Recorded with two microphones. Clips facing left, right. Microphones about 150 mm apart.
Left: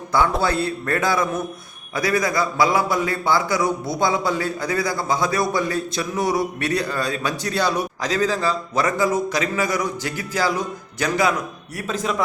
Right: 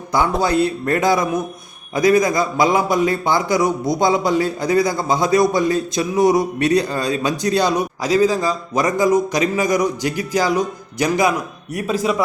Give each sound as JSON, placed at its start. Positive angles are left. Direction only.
{"t": 0.4, "sound": "a man's voice", "side_deg": -20}